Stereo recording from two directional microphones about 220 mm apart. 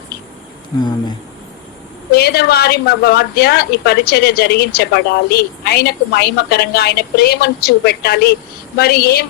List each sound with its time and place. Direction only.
2.1 s a woman's voice: 45° left (ahead or behind)